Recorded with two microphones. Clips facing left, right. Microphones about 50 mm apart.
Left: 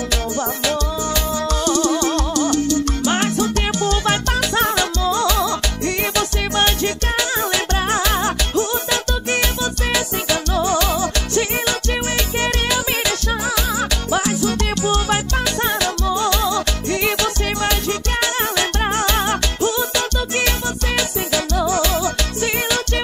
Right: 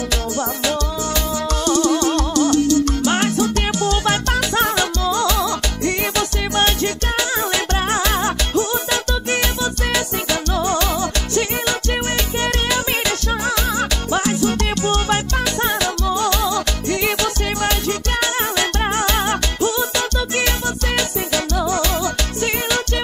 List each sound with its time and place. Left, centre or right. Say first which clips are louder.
2.3 s music: right 3 dB; left
5.4 s music: even; right
10.6 s music: left 1 dB; right
15.6 s music: even; centre
16.3 s music: even; left
18.2 s music: even; right
21.6 s music: left 1 dB; right